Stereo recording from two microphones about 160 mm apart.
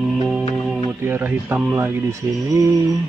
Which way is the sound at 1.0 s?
15° right (ahead or behind).